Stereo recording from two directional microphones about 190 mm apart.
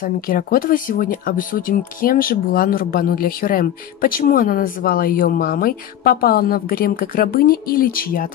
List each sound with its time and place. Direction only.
0.0 s speech: 50° left (ahead or behind)